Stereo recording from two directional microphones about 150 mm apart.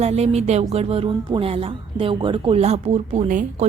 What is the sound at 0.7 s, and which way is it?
A woman's voice, 40° right (ahead or behind).